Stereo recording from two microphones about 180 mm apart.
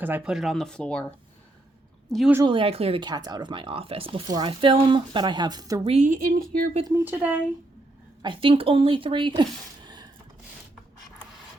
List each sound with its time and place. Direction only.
0.0 s speech: 5° right (ahead or behind)
2.3 s speech: 25° right (ahead or behind)
5.8 s a woman's voice: 35° right (ahead or behind)
6.8 s speech: 10° right (ahead or behind)
8.2 s speech: 30° right (ahead or behind)